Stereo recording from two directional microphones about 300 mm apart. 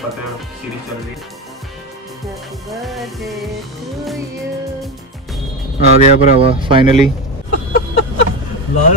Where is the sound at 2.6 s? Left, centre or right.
Centre.